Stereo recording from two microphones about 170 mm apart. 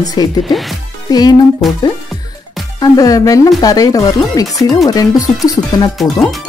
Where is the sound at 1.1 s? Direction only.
25° left (ahead or behind).